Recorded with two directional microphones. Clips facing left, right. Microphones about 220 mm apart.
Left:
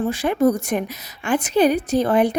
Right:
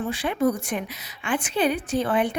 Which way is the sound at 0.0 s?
45° left (ahead or behind).